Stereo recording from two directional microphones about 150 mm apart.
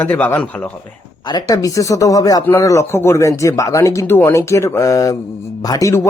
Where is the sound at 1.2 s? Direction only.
25° left (ahead or behind).